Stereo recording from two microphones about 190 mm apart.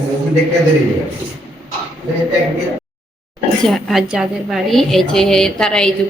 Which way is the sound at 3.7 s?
Centre (ahead or behind).